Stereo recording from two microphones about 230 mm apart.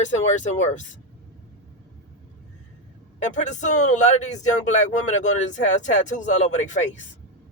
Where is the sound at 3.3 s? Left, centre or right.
Left.